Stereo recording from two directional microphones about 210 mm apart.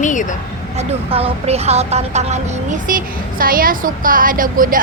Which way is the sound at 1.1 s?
25° right (ahead or behind).